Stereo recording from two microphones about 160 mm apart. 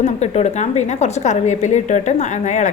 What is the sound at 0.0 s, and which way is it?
A woman's voice, 45° left (ahead or behind).